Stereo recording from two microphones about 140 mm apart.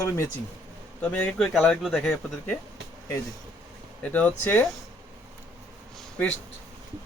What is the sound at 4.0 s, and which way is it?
Speech, 10° left (ahead or behind).